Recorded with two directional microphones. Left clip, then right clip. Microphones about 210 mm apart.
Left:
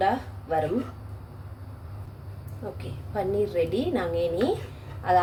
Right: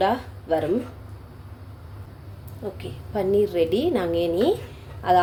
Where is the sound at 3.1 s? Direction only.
35° right (ahead or behind).